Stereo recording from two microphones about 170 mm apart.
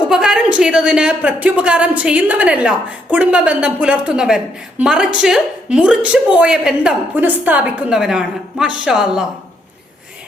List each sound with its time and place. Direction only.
0.1 s a woman's voice: 5° right (ahead or behind)